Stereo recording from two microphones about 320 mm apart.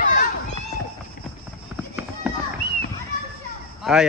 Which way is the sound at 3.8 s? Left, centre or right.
Centre.